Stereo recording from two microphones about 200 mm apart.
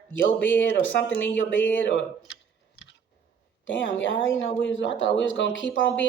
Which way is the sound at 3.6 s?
70° left (ahead or behind).